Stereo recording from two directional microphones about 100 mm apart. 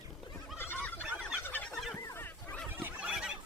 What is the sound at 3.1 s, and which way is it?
Fowl, 5° right (ahead or behind).